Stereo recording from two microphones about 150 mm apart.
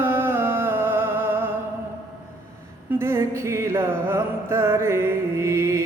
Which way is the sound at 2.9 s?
15° right (ahead or behind).